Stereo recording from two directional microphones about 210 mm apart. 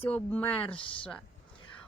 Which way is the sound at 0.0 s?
10° left (ahead or behind).